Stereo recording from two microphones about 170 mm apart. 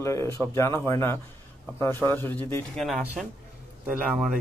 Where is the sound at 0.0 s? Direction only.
15° left (ahead or behind).